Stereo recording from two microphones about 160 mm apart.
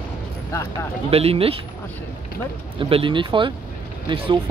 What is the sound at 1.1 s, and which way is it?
Speech, 40° right (ahead or behind).